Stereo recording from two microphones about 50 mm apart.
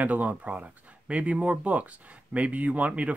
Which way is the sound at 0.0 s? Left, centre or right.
Right.